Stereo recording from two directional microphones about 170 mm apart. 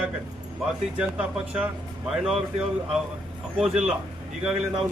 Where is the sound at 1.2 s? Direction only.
5° right (ahead or behind).